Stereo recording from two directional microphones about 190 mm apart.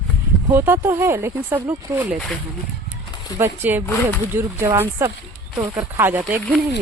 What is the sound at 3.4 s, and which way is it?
Speech, 10° right (ahead or behind).